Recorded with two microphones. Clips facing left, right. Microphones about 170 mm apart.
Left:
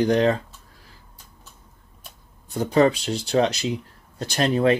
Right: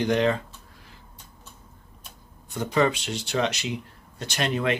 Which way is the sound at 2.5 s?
35° left (ahead or behind).